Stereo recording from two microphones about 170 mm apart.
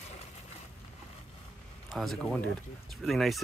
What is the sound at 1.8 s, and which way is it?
Speech, centre (ahead or behind).